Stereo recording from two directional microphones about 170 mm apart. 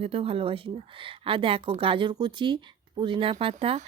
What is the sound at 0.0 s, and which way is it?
A woman's voice, 35° right (ahead or behind).